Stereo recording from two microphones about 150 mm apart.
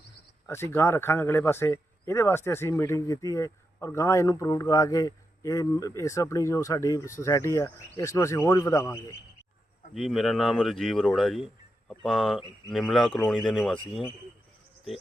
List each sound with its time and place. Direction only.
0.4 s speech: 15° left (ahead or behind)
9.9 s speech: centre (ahead or behind)